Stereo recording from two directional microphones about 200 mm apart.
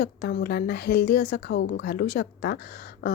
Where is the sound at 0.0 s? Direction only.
50° left (ahead or behind).